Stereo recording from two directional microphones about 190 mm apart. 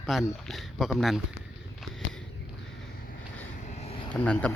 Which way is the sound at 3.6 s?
40° left (ahead or behind).